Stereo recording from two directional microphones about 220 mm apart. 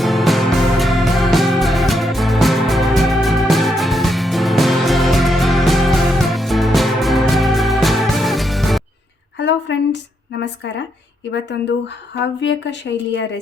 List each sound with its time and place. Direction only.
0.0 s music: centre (ahead or behind)
9.4 s a sound: 55° left (ahead or behind)
11.3 s speech: 55° left (ahead or behind)